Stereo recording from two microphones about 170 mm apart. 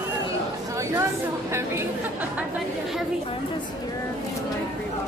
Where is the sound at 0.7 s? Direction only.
15° right (ahead or behind).